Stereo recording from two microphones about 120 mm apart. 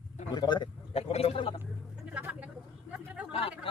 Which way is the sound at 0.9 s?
55° left (ahead or behind).